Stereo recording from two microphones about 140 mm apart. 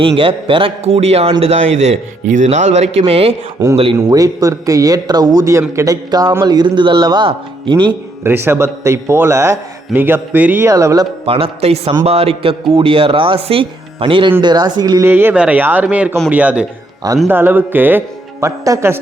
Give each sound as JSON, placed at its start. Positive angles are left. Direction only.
{"t": 0.2, "sound": "speech", "side_deg": -40}
{"t": 3.6, "sound": "speech", "side_deg": -25}
{"t": 8.2, "sound": "a man's voice", "side_deg": -15}
{"t": 11.3, "sound": "speech", "side_deg": -45}
{"t": 15.0, "sound": "a man's voice", "side_deg": -15}